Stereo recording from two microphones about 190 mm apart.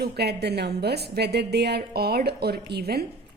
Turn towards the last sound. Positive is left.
turn(degrees=-55)  # may be behind; listen again after turning